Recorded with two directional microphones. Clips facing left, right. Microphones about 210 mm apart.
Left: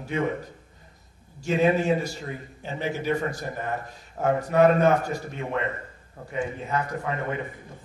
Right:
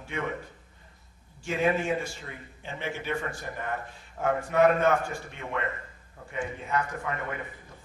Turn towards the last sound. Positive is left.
turn(degrees=30)  # may be behind; listen again after turning